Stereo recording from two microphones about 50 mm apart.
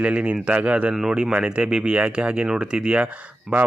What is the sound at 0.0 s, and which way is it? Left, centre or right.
Speech, right.